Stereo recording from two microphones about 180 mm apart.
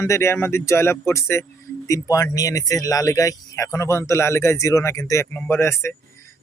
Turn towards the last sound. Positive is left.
turn(degrees=15)  # may be behind; listen again after turning